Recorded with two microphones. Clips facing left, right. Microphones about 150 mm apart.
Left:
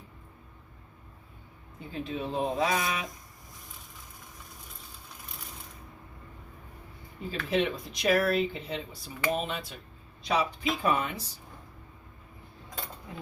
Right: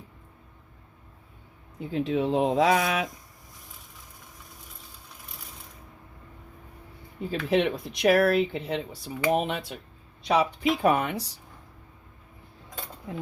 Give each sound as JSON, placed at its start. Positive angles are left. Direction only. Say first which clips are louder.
{"t": 1.8, "sound": "speech", "louder": "right 8 dB", "side_deg": -90}
{"t": 7.3, "sound": "speech", "louder": "right 4 dB", "side_deg": -70}